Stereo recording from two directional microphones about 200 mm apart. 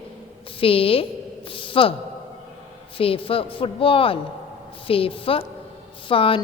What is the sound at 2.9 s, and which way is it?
A woman's voice, 25° left (ahead or behind).